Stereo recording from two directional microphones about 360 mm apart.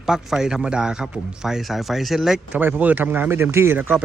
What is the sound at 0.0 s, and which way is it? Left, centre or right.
Speech, centre.